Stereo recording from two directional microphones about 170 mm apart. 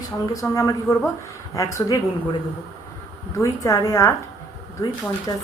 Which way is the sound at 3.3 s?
20° left (ahead or behind).